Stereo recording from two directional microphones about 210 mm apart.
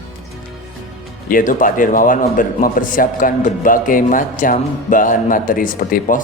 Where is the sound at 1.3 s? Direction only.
40° left (ahead or behind).